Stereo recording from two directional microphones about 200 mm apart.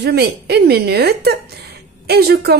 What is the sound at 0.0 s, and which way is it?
A woman's voice, 55° right (ahead or behind).